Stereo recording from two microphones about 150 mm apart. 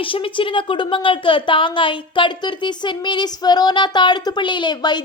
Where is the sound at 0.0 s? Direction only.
35° left (ahead or behind).